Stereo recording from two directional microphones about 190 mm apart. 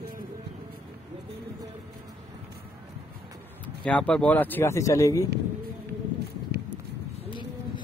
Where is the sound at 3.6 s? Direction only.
5° left (ahead or behind).